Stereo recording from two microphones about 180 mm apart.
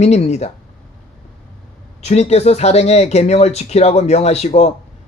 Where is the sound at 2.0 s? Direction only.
35° left (ahead or behind).